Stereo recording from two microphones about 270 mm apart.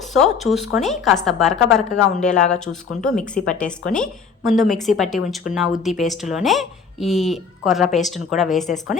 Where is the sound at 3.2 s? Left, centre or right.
Left.